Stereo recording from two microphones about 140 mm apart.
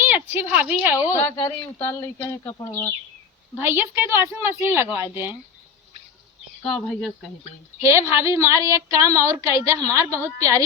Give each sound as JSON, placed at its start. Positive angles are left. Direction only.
{"t": 0.1, "sound": "speech", "side_deg": -15}
{"t": 1.1, "sound": "speech", "side_deg": 20}
{"t": 2.4, "sound": "speech", "side_deg": 35}
{"t": 3.6, "sound": "a woman's voice", "side_deg": -15}
{"t": 6.6, "sound": "speech", "side_deg": 5}
{"t": 7.8, "sound": "a woman's voice", "side_deg": -20}